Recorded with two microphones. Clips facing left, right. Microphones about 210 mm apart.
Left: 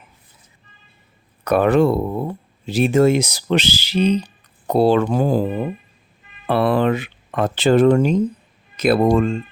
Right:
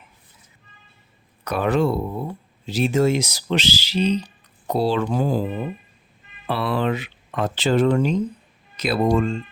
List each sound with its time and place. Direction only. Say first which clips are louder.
1.5 s speech: left 6 dB; 55° left (ahead or behind)
6.5 s speech: left 6 dB; 55° left (ahead or behind)